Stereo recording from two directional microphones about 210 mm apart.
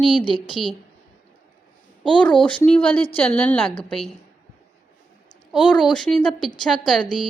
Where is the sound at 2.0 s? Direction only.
5° left (ahead or behind).